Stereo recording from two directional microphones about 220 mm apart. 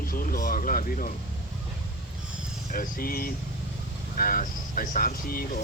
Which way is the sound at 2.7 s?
40° left (ahead or behind).